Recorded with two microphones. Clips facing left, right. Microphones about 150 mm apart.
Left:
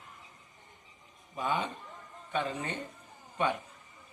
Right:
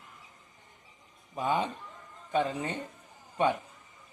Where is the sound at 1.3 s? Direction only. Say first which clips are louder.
Right 3 dB; 35° right (ahead or behind).